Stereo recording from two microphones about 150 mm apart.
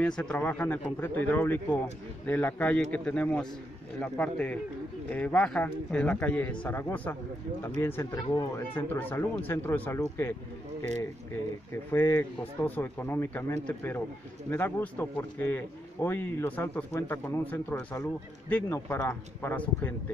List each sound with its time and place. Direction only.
0.0 s speech: 5° left (ahead or behind)
11.9 s speech: 15° left (ahead or behind)